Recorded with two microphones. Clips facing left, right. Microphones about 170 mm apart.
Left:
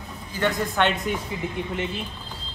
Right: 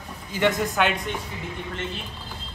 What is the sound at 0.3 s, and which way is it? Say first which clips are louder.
Speech: right 2 dB; 20° right (ahead or behind).